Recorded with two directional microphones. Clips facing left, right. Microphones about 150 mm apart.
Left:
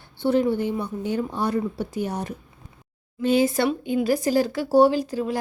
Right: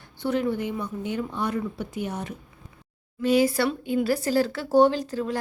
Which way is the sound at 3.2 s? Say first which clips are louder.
Left 1 dB; 25° left (ahead or behind).